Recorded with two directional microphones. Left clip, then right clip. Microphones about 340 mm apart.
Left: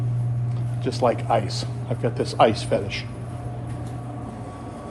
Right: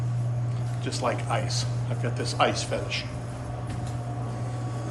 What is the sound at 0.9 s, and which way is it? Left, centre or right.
Speech, centre.